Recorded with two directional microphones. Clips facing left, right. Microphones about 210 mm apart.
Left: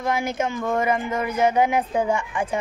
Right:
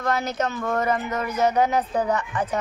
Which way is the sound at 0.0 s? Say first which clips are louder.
Left 1 dB; 10° left (ahead or behind).